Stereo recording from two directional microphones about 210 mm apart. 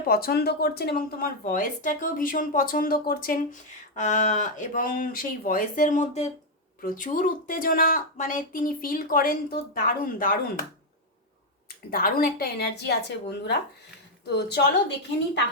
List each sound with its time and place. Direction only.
0.0 s speech: 45° left (ahead or behind)
11.9 s a woman's voice: 45° left (ahead or behind)